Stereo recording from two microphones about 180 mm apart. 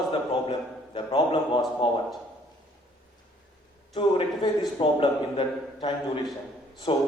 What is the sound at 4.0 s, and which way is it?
A man's voice, 30° left (ahead or behind).